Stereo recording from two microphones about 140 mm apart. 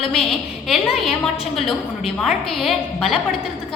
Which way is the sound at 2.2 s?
Centre (ahead or behind).